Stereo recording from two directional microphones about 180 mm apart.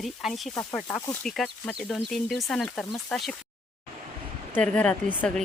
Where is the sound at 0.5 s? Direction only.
15° left (ahead or behind).